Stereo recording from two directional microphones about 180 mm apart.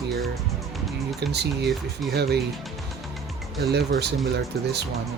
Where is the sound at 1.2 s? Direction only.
65° right (ahead or behind).